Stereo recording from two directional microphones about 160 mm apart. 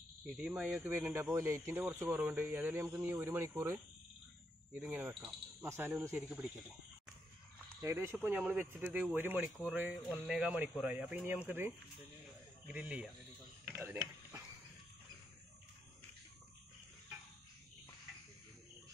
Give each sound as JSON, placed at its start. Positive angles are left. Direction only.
{"t": 0.3, "sound": "speech", "side_deg": 0}
{"t": 0.6, "sound": "speech", "side_deg": -10}
{"t": 7.8, "sound": "speech", "side_deg": -20}
{"t": 13.7, "sound": "mechanisms", "side_deg": -15}